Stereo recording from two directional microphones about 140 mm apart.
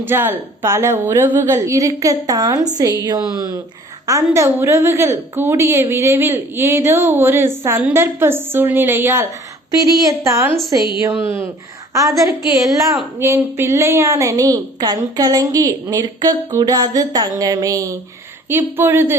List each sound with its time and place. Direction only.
0.0 s a woman's voice: 15° right (ahead or behind)
12.6 s a woman's voice: 25° right (ahead or behind)